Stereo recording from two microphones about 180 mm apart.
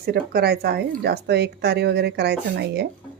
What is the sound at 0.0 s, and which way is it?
Speech, 60° right (ahead or behind).